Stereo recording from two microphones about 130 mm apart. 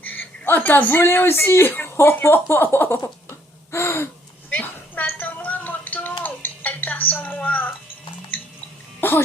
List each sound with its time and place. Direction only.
0.0 s speech: 15° left (ahead or behind)
3.0 s a sound: 20° left (ahead or behind)
6.2 s music: 15° left (ahead or behind)
9.0 s music: 15° left (ahead or behind)